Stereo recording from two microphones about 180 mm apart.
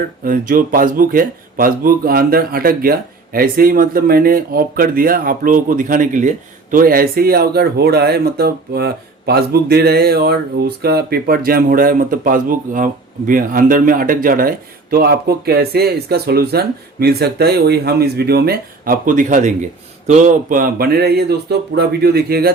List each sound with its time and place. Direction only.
0.3 s speech: 50° right (ahead or behind)